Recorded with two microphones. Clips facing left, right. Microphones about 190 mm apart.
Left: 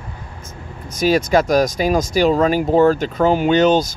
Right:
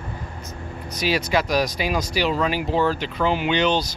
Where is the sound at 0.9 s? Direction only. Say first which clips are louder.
Left 7 dB; 45° left (ahead or behind).